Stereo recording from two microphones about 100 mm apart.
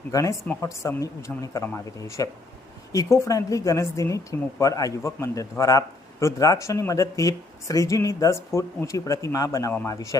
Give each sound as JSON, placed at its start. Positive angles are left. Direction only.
{"t": 0.1, "sound": "a woman's voice", "side_deg": 35}
{"t": 1.6, "sound": "speech", "side_deg": 20}
{"t": 2.0, "sound": "a woman's voice", "side_deg": 35}